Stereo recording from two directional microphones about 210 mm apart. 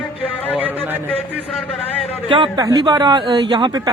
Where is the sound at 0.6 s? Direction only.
10° right (ahead or behind).